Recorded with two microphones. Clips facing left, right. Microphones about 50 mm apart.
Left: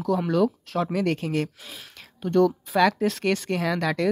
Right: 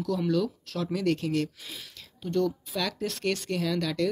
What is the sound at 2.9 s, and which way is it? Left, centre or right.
Speech, left.